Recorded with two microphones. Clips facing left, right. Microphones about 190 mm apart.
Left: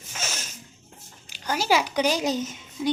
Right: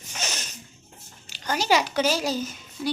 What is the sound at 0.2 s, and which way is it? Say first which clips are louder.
Zipper: right 1 dB; 5° left (ahead or behind).